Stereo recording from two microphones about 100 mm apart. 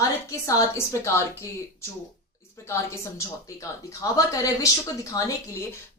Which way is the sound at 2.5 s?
30° left (ahead or behind).